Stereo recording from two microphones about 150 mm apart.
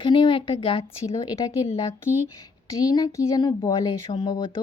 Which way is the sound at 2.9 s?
20° left (ahead or behind).